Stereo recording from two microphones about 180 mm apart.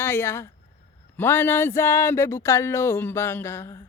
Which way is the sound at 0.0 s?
10° left (ahead or behind).